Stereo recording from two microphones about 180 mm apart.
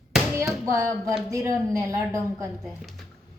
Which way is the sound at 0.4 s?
Centre (ahead or behind).